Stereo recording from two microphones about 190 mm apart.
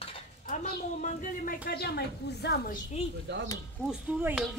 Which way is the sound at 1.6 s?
55° left (ahead or behind).